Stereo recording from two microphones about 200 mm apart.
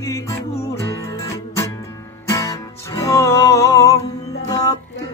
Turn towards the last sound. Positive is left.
turn(degrees=20)  # may be behind; listen again after turning